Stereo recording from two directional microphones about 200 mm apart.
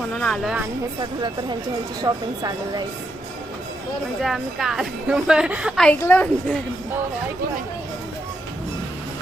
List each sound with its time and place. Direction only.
0.1 s a woman's voice: 5° left (ahead or behind)
2.0 s speech: 20° right (ahead or behind)
4.2 s a woman's voice: centre (ahead or behind)